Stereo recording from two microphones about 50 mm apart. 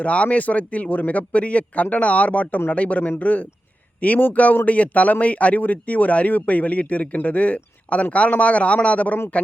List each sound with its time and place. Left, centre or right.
0.0 s speech: left